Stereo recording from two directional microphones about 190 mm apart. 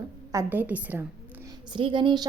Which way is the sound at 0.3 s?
15° right (ahead or behind).